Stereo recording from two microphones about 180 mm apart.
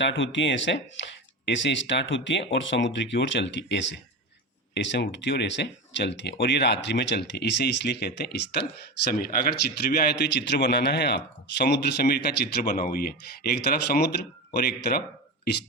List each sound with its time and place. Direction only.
0.0 s speech: 90° left; by 8.4 s 65° left (ahead or behind)
9.6 s a man's voice: 60° left (ahead or behind)